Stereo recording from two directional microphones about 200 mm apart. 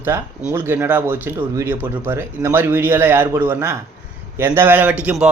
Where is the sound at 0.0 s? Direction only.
10° right (ahead or behind).